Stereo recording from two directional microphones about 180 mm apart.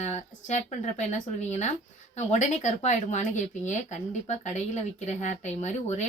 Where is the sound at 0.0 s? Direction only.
40° left (ahead or behind).